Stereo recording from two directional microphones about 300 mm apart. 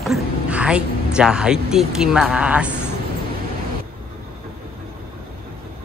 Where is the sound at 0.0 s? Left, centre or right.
Centre.